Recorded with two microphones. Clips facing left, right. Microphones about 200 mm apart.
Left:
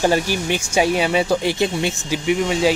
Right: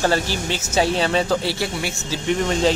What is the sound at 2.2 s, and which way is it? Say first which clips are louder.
Speech: left 1 dB; 10° left (ahead or behind).